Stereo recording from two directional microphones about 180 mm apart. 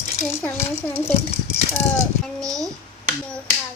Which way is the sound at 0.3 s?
15° left (ahead or behind).